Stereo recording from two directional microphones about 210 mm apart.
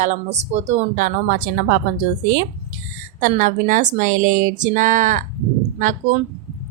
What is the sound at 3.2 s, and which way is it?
Speech, 40° right (ahead or behind).